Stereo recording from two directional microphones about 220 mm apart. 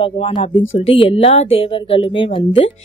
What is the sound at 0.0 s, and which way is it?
Speech, 25° left (ahead or behind).